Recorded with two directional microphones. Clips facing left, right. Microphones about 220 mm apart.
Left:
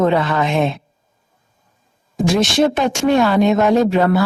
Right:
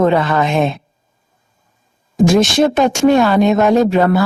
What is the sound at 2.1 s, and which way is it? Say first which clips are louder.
Speech: right 4 dB; 45° right (ahead or behind).